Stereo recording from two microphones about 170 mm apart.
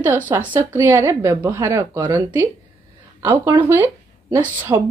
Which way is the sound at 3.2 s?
15° right (ahead or behind).